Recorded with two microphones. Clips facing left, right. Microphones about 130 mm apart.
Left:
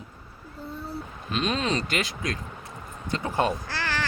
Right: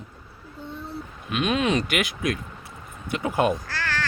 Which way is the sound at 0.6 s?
10° left (ahead or behind).